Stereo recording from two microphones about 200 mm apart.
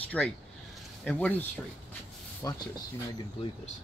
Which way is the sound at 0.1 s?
5° left (ahead or behind).